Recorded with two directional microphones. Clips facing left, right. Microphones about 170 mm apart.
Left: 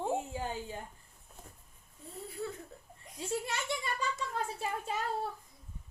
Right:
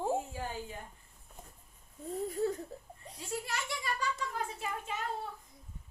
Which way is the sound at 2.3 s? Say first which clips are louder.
Right 6 dB; 40° right (ahead or behind).